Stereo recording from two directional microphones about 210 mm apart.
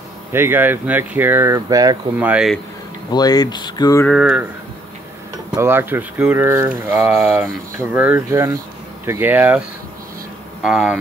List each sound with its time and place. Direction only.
0.3 s speech: 10° right (ahead or behind)
2.2 s speech: 5° right (ahead or behind)
3.1 s speech: 20° left (ahead or behind)
4.1 s speech: 5° right (ahead or behind)
5.6 s speech: 10° right (ahead or behind)
10.6 s speech: 5° right (ahead or behind)